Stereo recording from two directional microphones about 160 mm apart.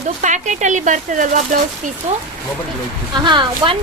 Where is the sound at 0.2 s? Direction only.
50° right (ahead or behind).